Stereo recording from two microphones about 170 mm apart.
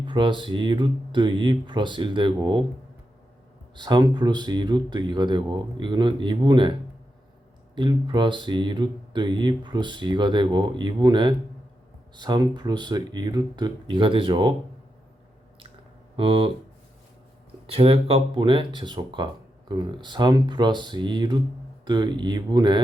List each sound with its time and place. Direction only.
0.0 s speech: 30° right (ahead or behind)
3.8 s speech: 25° right (ahead or behind)
7.8 s speech: 25° right (ahead or behind)
16.1 s speech: 30° right (ahead or behind)
17.7 s speech: 35° right (ahead or behind)